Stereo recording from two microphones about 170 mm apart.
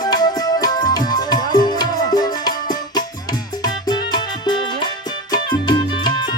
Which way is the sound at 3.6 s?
25° left (ahead or behind).